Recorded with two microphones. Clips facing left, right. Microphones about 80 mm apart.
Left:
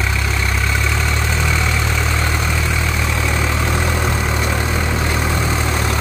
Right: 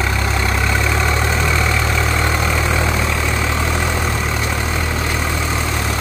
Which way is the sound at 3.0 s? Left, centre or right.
Centre.